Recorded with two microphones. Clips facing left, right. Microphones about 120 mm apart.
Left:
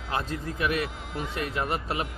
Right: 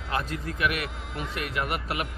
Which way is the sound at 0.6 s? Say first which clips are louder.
Left 1 dB; 30° left (ahead or behind).